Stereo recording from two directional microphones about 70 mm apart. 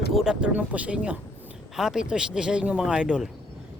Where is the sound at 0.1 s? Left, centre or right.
Centre.